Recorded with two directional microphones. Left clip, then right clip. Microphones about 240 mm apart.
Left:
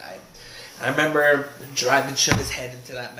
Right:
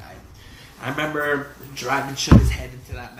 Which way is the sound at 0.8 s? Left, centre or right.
Centre.